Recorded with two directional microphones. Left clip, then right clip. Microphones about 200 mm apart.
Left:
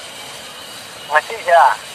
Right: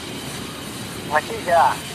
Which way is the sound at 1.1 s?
15° left (ahead or behind).